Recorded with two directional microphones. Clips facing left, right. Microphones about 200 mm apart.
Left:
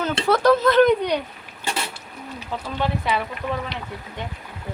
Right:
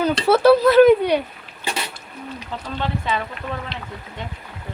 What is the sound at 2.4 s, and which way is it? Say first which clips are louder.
Speech: left 2 dB; 10° left (ahead or behind).